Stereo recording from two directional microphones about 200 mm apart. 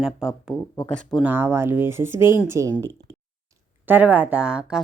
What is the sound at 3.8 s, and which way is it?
Speech, 10° right (ahead or behind).